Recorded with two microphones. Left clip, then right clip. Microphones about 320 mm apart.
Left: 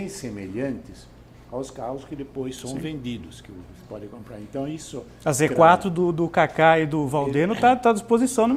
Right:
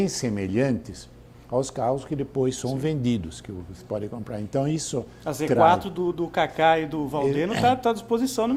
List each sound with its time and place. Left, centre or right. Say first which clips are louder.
0.0 s speech: right 7 dB; right
5.2 s speech: left 3 dB; left